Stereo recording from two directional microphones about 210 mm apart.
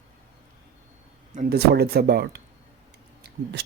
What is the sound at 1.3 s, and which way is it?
Speech, 35° right (ahead or behind).